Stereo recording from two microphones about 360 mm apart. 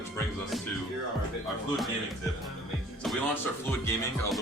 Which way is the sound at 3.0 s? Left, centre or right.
Centre.